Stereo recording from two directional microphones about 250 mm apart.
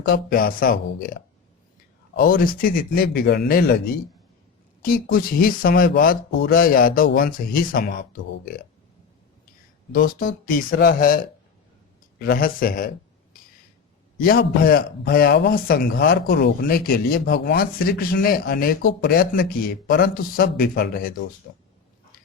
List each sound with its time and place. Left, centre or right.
0.0 s a man's voice: left
9.9 s a man's voice: left
14.2 s a man's voice: left